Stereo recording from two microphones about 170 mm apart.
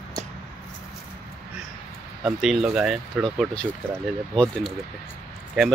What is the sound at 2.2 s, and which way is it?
Speech, centre (ahead or behind).